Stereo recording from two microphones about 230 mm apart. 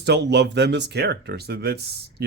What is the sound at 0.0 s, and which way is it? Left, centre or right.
Speech, right.